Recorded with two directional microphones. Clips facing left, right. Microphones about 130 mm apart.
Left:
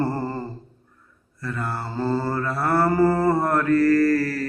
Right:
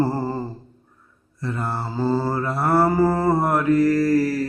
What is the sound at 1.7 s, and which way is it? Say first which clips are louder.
Mantra: right 2 dB; 5° right (ahead or behind).